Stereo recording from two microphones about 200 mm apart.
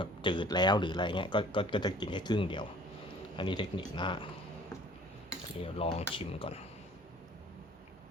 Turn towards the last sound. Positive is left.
turn(degrees=30)  # may be behind; listen again after turning